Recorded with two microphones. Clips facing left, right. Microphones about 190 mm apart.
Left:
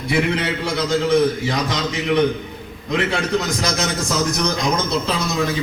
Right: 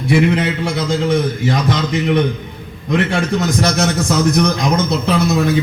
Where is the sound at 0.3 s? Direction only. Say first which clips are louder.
Right 3 dB; 50° right (ahead or behind).